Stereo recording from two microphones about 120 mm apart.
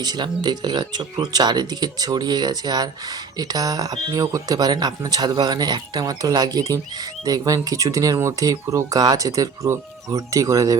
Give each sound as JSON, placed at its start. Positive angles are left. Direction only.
{"t": 0.0, "sound": "speech", "side_deg": -35}